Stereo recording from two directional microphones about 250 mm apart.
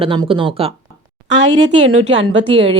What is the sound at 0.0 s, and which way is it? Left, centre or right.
Speech, right.